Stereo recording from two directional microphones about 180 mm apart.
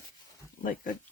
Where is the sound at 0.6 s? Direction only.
50° left (ahead or behind).